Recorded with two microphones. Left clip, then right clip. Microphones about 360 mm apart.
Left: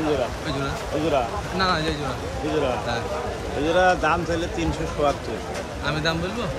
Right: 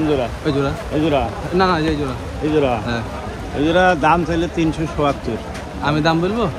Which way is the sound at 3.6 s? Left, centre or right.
Centre.